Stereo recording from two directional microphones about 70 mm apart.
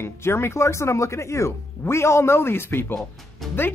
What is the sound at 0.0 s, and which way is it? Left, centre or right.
Speech, left.